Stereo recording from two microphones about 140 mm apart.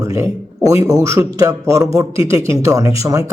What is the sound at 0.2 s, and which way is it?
A man's voice, 25° right (ahead or behind).